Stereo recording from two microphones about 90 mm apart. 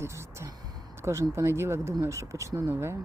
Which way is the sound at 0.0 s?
30° right (ahead or behind).